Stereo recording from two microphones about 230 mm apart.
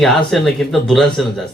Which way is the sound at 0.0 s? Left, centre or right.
Centre.